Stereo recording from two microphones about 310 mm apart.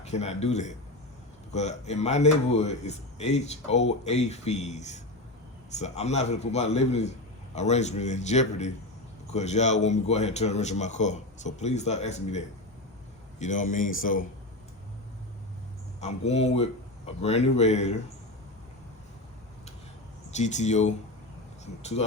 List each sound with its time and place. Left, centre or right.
0.0 s speech: left
13.4 s speech: left
16.0 s speech: left
20.3 s speech: left